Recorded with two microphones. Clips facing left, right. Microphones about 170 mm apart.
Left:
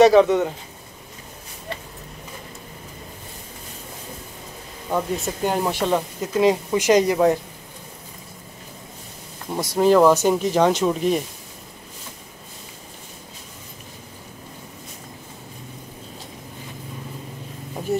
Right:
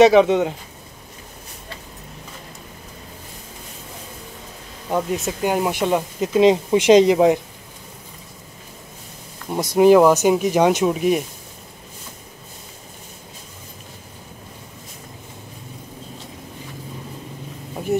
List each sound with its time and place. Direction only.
0.0 s speech: 20° right (ahead or behind)
4.9 s speech: 5° right (ahead or behind)
9.5 s speech: 15° right (ahead or behind)